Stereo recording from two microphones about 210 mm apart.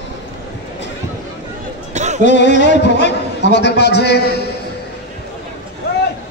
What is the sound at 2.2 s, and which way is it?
A man's voice, 55° left (ahead or behind).